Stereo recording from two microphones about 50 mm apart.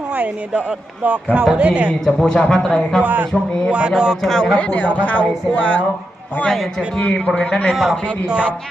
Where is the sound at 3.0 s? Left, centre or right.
Right.